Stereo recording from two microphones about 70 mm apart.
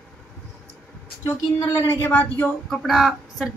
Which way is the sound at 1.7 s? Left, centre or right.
Left.